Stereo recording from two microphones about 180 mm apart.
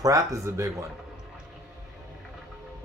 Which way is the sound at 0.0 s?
20° right (ahead or behind).